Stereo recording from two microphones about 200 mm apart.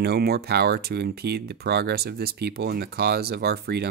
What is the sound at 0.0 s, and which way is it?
Speech, 50° right (ahead or behind).